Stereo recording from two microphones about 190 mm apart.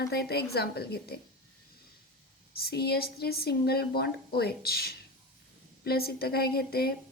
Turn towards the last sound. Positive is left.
turn(degrees=55)  # may be behind; listen again after turning